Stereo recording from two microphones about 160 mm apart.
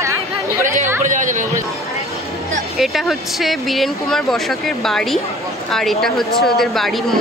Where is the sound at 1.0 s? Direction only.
50° right (ahead or behind).